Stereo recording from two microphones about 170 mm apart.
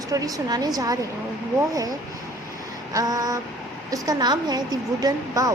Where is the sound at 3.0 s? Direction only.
20° right (ahead or behind).